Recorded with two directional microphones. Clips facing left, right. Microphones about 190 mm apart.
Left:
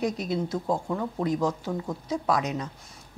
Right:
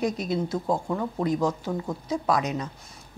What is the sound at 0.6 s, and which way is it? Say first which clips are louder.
Speech: right 1 dB; 25° right (ahead or behind).